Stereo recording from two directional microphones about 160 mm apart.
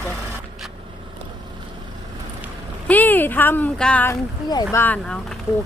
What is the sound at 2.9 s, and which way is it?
Speech, 10° left (ahead or behind).